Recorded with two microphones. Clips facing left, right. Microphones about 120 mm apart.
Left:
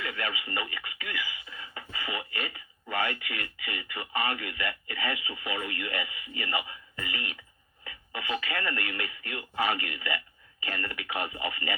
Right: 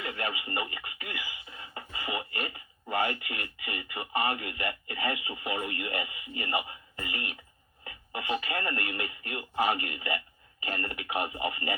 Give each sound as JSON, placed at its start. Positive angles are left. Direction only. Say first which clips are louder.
{"t": 0.0, "sound": "speech", "louder": "even", "side_deg": -25}